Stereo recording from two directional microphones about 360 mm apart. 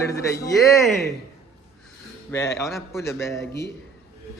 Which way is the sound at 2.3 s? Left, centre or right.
Centre.